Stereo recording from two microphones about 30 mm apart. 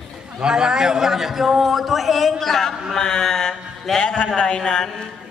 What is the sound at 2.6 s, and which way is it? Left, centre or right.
Speech, centre.